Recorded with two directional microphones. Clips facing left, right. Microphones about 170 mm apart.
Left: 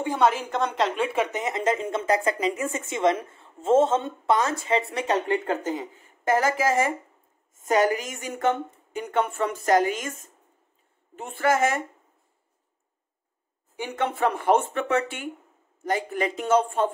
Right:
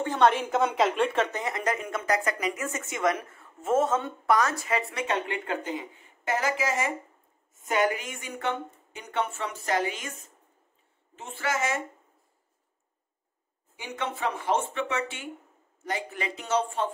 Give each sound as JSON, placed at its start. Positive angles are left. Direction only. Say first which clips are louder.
{"t": 0.0, "sound": "a woman's voice", "louder": "even", "side_deg": 10}
{"t": 0.3, "sound": "a woman's voice", "louder": "right 1 dB", "side_deg": 0}
{"t": 13.7, "sound": "a woman's voice", "louder": "left 7 dB", "side_deg": 55}